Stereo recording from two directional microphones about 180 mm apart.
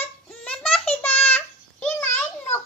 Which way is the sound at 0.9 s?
10° left (ahead or behind).